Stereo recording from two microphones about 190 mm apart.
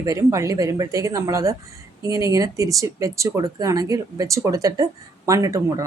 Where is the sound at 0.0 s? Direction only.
15° right (ahead or behind).